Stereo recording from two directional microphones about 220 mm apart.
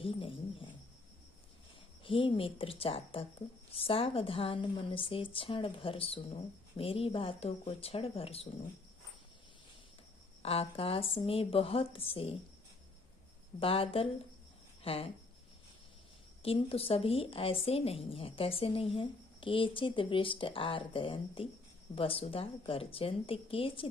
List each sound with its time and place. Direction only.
0.0 s a woman's voice: 25° left (ahead or behind)
2.0 s a woman's voice: 25° left (ahead or behind)
10.4 s a woman's voice: 25° left (ahead or behind)
13.6 s a woman's voice: 25° left (ahead or behind)
16.4 s a woman's voice: 25° left (ahead or behind)